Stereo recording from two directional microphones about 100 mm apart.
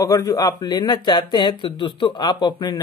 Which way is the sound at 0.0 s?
35° left (ahead or behind).